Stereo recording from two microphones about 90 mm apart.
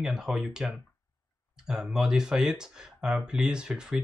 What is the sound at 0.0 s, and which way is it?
Speech, 5° right (ahead or behind).